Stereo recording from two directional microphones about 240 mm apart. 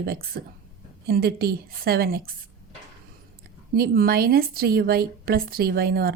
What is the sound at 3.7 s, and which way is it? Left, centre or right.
A woman's voice, right.